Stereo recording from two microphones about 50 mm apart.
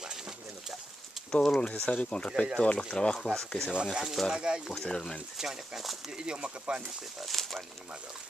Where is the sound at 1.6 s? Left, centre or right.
Left.